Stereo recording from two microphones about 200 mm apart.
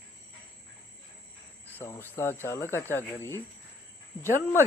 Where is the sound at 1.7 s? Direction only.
10° left (ahead or behind).